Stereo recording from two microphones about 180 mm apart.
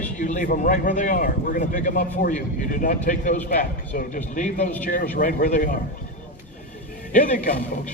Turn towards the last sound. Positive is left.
turn(degrees=45)  # may be behind; listen again after turning